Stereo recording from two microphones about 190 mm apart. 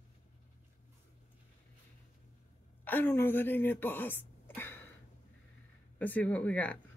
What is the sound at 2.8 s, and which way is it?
A woman's voice, 10° left (ahead or behind).